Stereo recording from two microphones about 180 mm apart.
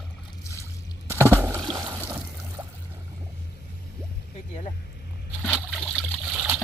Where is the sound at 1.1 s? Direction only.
15° left (ahead or behind).